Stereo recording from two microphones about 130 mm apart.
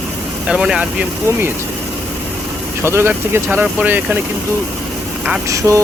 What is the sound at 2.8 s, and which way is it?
Speech, 20° right (ahead or behind).